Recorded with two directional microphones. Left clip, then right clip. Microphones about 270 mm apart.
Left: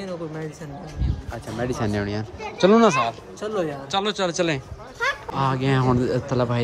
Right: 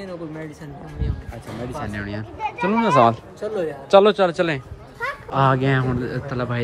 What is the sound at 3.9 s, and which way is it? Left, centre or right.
Speech, centre.